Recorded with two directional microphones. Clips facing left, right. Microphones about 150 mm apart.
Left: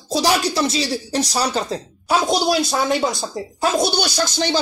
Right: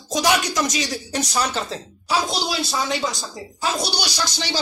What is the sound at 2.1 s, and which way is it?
A woman's voice, 50° left (ahead or behind).